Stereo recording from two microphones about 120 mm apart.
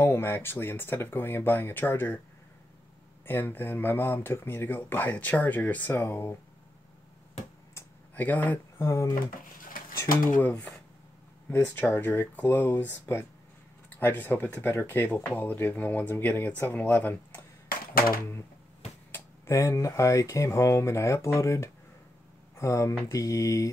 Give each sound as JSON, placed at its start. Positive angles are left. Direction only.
{"t": 0.0, "sound": "speech", "side_deg": 20}
{"t": 3.3, "sound": "speech", "side_deg": 15}
{"t": 8.1, "sound": "speech", "side_deg": 15}
{"t": 8.8, "sound": "speech", "side_deg": 25}
{"t": 11.5, "sound": "speech", "side_deg": 15}
{"t": 19.1, "sound": "speech", "side_deg": 25}